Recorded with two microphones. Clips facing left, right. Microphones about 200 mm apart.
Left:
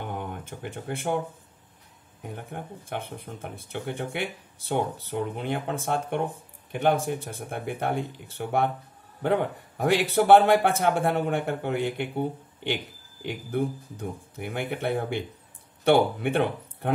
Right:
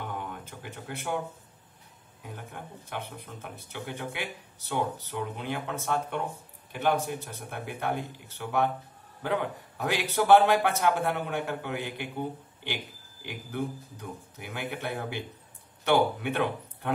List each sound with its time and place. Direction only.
0.0 s a sound: 50° left (ahead or behind)
2.2 s speech: 50° left (ahead or behind)
13.2 s speech: 50° left (ahead or behind)